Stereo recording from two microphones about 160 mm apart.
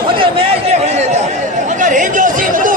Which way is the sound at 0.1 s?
35° right (ahead or behind).